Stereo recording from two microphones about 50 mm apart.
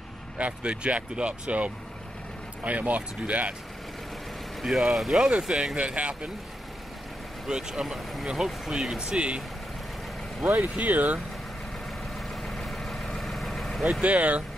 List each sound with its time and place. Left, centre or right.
0.4 s speech: right
4.6 s speech: centre
5.8 s speech: right
7.4 s speech: centre
10.6 s speech: right
12.2 s vehicle: centre
14.0 s speech: right